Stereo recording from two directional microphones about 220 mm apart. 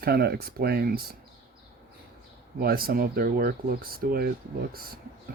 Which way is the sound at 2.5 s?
45° right (ahead or behind).